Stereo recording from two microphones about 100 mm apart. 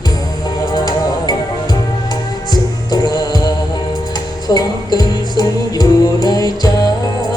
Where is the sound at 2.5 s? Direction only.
45° left (ahead or behind).